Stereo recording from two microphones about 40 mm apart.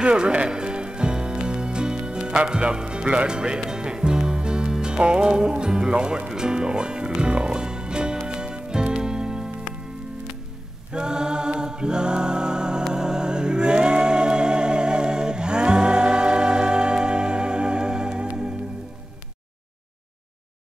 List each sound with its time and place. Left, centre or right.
0.0 s speech: right
0.5 s music: right
10.9 s a capella: right
12.9 s music: centre